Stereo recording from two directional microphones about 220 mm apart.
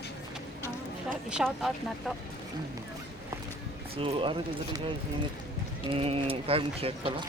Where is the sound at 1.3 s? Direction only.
Centre (ahead or behind).